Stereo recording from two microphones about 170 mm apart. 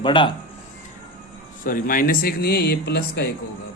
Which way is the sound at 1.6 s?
55° left (ahead or behind).